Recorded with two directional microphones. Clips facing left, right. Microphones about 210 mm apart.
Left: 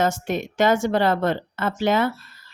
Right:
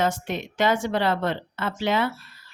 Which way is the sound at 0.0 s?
45° left (ahead or behind).